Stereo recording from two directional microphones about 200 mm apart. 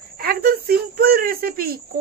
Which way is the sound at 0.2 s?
50° right (ahead or behind).